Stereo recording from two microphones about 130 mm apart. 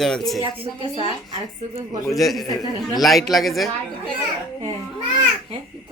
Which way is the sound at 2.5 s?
30° left (ahead or behind).